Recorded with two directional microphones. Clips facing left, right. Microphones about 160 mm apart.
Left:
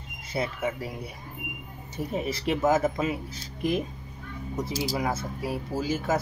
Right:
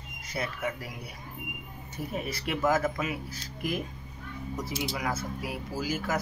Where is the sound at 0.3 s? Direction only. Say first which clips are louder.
Left 4 dB; 25° left (ahead or behind).